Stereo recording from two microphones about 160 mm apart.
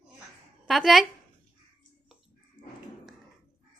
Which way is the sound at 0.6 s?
Centre (ahead or behind).